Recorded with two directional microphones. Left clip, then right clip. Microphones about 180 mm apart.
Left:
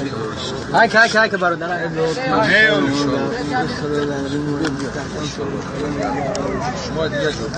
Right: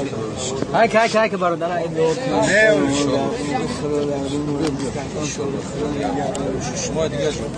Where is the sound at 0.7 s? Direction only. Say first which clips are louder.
Left 3 dB; 30° right (ahead or behind).